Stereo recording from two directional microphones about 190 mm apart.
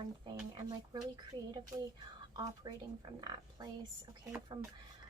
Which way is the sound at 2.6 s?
15° right (ahead or behind).